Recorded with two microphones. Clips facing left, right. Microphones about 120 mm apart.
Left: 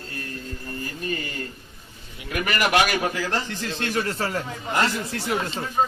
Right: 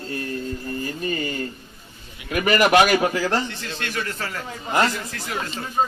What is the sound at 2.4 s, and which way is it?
Speech, 25° right (ahead or behind).